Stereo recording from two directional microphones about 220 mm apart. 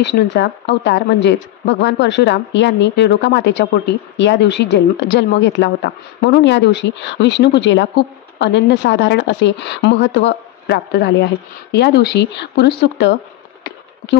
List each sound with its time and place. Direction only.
0.0 s speech: 50° left (ahead or behind)